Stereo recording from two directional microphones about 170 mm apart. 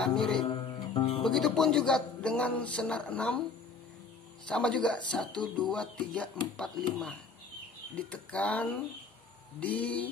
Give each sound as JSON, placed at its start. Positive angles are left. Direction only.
{"t": 0.0, "sound": "a man's voice", "side_deg": 5}
{"t": 0.4, "sound": "music", "side_deg": 30}
{"t": 1.2, "sound": "a man's voice", "side_deg": 5}
{"t": 4.5, "sound": "a man's voice", "side_deg": 5}